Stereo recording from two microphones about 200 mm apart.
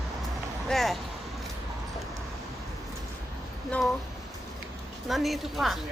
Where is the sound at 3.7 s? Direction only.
Centre (ahead or behind).